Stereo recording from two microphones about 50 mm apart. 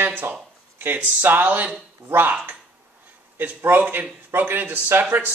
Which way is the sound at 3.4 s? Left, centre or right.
Right.